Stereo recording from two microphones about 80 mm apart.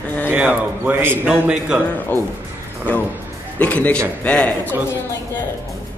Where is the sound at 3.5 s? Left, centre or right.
Centre.